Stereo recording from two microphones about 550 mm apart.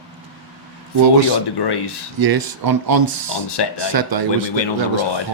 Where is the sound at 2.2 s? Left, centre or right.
Right.